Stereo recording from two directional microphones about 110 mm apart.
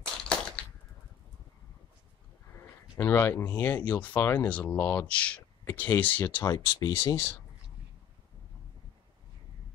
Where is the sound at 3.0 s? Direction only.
20° left (ahead or behind).